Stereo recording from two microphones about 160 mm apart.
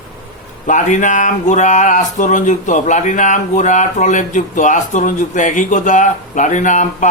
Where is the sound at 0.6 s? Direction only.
50° left (ahead or behind).